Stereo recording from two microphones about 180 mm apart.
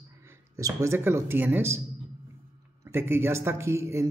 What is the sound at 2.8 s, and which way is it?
A man's voice, 15° right (ahead or behind).